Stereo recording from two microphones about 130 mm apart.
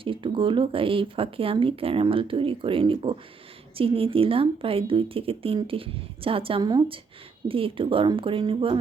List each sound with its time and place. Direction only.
0.0 s speech: 40° right (ahead or behind)